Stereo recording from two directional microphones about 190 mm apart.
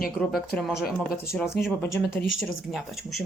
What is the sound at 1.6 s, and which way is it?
Speech, 55° left (ahead or behind).